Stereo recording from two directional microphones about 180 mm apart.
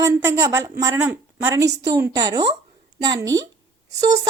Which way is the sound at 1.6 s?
70° right (ahead or behind).